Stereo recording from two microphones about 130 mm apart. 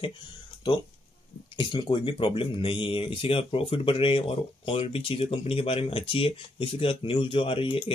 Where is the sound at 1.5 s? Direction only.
35° left (ahead or behind).